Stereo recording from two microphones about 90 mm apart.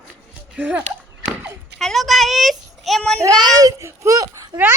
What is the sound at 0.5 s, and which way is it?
Speech, 15° right (ahead or behind).